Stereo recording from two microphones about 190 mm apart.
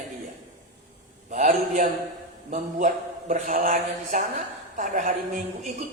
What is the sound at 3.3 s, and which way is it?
A man's voice, 40° right (ahead or behind).